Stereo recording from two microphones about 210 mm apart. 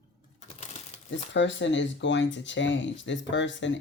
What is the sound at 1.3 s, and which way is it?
Speech, 60° left (ahead or behind).